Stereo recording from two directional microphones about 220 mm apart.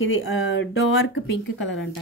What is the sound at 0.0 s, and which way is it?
A woman's voice, 60° left (ahead or behind).